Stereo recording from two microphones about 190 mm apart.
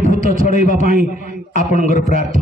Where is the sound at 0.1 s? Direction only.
40° left (ahead or behind).